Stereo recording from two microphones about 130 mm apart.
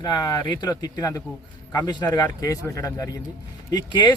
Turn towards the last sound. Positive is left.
turn(degrees=35)  # may be behind; listen again after turning